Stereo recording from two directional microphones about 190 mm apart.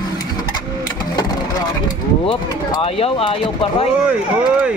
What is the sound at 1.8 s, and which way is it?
Speech, 25° left (ahead or behind).